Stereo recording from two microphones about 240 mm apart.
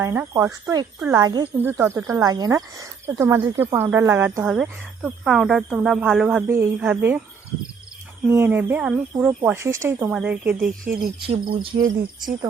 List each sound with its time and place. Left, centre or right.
0.0 s speech: centre
8.3 s speech: centre
10.8 s speech: right